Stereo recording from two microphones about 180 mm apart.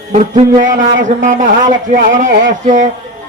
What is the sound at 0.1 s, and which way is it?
A man's voice, 40° right (ahead or behind).